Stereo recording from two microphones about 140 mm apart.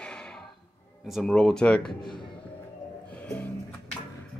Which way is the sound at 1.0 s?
Centre (ahead or behind).